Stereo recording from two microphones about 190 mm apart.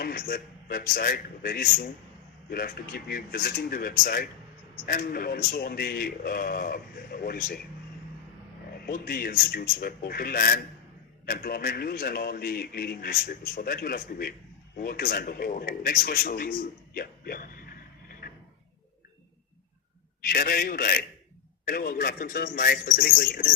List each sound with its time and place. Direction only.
0.0 s a man's voice: 50° left (ahead or behind)
8.9 s a man's voice: 50° left (ahead or behind)
20.2 s a man's voice: 50° left (ahead or behind)